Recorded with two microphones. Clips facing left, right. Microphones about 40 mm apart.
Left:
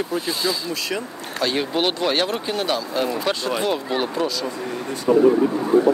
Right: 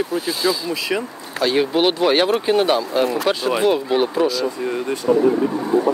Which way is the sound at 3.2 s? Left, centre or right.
Centre.